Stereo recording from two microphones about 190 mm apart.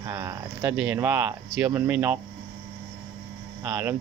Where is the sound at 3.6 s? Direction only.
10° right (ahead or behind).